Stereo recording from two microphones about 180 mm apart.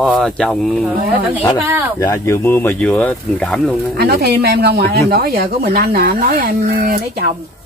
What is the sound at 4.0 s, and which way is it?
Speech, 65° right (ahead or behind).